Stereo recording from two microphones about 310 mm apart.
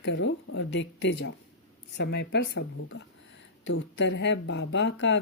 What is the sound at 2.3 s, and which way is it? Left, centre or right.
Speech, left.